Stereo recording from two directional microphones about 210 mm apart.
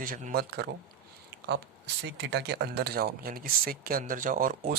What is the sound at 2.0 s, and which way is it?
Speech, 55° right (ahead or behind).